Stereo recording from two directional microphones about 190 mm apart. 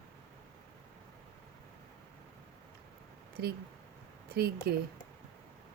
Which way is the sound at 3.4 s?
55° right (ahead or behind).